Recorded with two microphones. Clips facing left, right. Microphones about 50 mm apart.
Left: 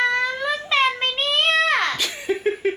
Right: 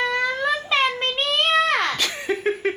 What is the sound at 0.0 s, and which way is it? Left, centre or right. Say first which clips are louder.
Child singing: left 1 dB; centre.